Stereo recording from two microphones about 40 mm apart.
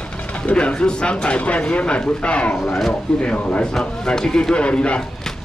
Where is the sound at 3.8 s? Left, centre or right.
Centre.